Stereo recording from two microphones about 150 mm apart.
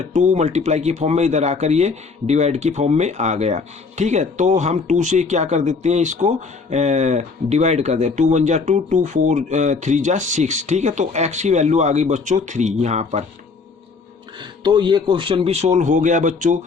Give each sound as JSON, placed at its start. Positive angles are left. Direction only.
{"t": 0.1, "sound": "speech", "side_deg": -50}
{"t": 14.6, "sound": "speech", "side_deg": -30}
{"t": 15.8, "sound": "speech", "side_deg": -55}